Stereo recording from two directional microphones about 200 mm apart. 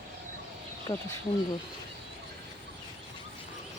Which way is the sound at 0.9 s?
15° left (ahead or behind).